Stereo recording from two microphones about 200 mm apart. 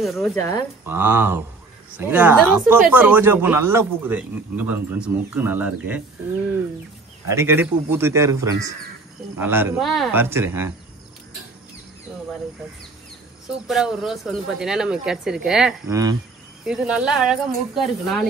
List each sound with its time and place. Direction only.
0.0 s speech: centre (ahead or behind)
0.4 s speech: 20° left (ahead or behind)
0.8 s a man's voice: 10° right (ahead or behind)
7.2 s a man's voice: 15° right (ahead or behind)
9.8 s speech: centre (ahead or behind)
10.1 s a man's voice: 10° right (ahead or behind)
13.7 s speech: centre (ahead or behind)
15.9 s a man's voice: 20° right (ahead or behind)
16.6 s speech: 5° right (ahead or behind)